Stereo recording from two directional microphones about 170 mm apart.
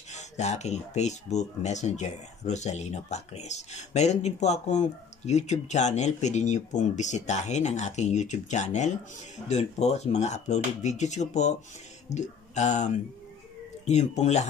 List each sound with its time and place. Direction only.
0.1 s speech: 40° left (ahead or behind)